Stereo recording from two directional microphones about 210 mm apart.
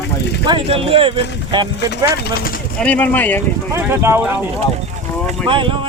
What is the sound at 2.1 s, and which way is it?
Speech, 45° left (ahead or behind).